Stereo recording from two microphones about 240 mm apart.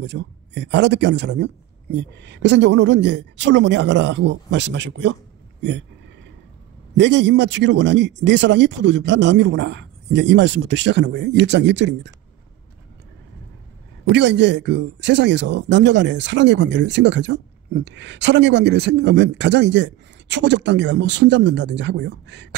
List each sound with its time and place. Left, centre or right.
0.0 s speech: right
7.0 s speech: right
14.1 s speech: right